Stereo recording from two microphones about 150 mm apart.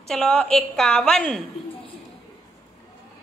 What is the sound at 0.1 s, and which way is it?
A woman's voice, 5° left (ahead or behind).